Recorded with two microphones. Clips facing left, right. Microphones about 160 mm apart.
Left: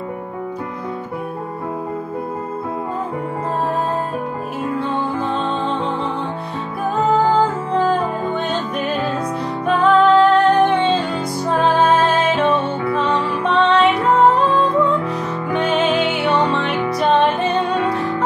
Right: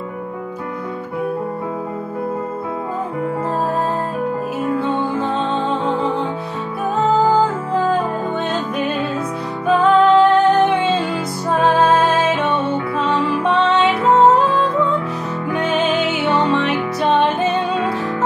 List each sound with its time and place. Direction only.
9.8 s music: centre (ahead or behind)
15.7 s music: centre (ahead or behind)